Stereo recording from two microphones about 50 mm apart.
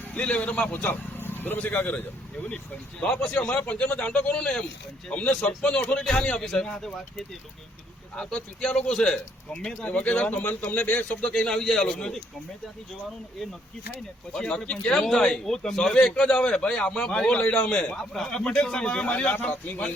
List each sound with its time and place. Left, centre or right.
0.2 s a man's voice: left
3.0 s a man's voice: left
3.6 s a man's voice: left; by 6.9 s centre
8.1 s a man's voice: centre
9.8 s a man's voice: left
10.4 s a man's voice: left
10.8 s a man's voice: left; by 12.2 s centre
14.3 s a man's voice: centre
17.9 s a man's voice: centre
19.0 s a man's voice: left